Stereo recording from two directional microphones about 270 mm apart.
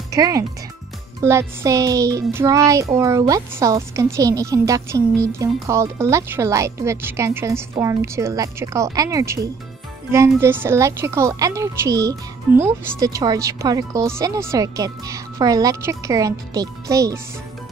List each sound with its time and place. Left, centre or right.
0.1 s speech: centre
1.2 s music: centre